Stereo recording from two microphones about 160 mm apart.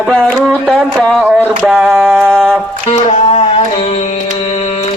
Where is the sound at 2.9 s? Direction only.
40° left (ahead or behind).